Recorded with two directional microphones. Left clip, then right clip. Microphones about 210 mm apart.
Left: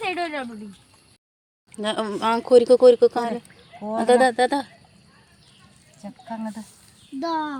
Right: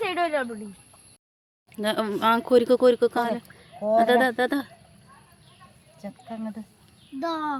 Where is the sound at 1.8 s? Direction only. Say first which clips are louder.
Even; 10° right (ahead or behind).